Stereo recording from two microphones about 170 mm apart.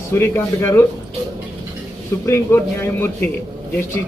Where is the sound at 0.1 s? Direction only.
15° left (ahead or behind).